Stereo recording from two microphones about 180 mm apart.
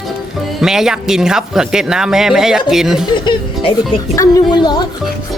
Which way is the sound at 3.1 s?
25° left (ahead or behind).